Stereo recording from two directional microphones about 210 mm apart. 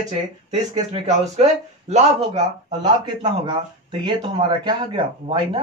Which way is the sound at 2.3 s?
20° right (ahead or behind).